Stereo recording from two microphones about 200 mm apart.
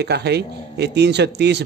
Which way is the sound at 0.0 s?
55° right (ahead or behind).